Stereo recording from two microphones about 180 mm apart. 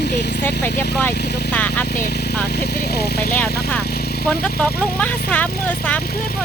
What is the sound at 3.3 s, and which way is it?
Speech, 10° left (ahead or behind).